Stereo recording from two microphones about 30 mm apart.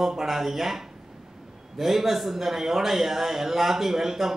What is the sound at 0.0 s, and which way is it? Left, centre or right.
A man's voice, centre.